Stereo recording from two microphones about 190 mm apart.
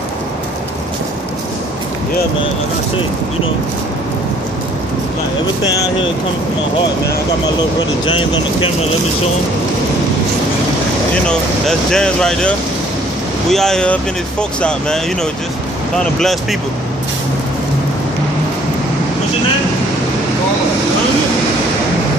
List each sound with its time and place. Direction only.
8.0 s speech: 25° left (ahead or behind)
11.2 s speech: 5° left (ahead or behind)
16.2 s speech: centre (ahead or behind)